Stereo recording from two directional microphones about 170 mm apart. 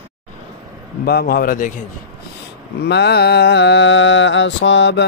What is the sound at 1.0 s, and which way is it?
Speech, 65° left (ahead or behind).